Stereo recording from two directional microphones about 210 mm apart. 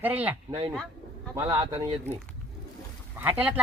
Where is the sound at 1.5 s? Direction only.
25° right (ahead or behind).